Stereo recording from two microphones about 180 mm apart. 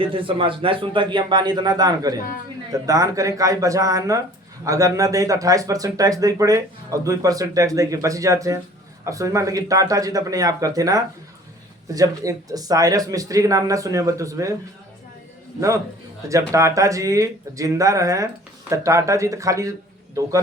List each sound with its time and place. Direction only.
0.0 s speech: 30° right (ahead or behind)
16.3 s speech: 15° right (ahead or behind)